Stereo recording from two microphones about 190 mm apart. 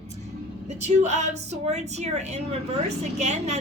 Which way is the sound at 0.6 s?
35° right (ahead or behind).